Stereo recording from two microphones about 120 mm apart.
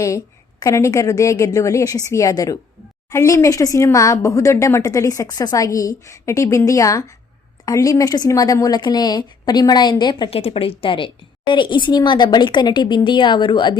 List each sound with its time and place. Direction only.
0.6 s a woman's voice: 25° left (ahead or behind)
10.2 s a woman's voice: 55° left (ahead or behind)